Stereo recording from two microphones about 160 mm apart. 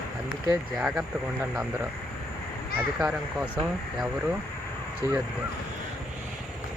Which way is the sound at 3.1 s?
15° right (ahead or behind).